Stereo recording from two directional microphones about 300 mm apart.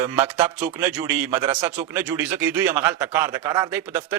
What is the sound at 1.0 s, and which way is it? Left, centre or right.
Speech, centre.